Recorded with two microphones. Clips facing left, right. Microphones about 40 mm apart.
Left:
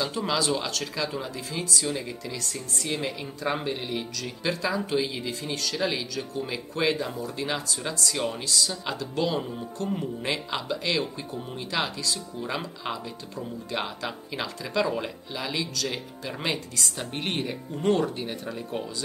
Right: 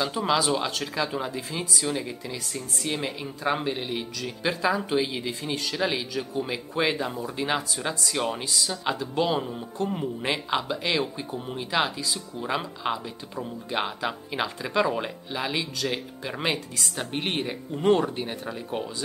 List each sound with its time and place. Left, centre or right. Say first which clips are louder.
0.0 s speech: right 3 dB; centre